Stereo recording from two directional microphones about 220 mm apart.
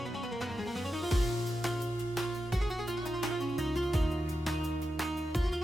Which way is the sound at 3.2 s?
Centre (ahead or behind).